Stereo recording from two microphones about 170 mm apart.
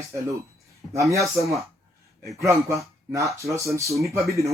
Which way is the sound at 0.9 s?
20° right (ahead or behind).